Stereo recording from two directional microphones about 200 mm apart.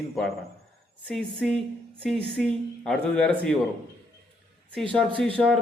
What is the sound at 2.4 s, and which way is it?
Speech, centre (ahead or behind).